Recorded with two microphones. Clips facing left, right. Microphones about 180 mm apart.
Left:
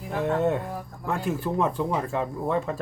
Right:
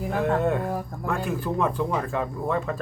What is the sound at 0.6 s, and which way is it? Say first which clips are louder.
Speech: right 6 dB; 60° right (ahead or behind).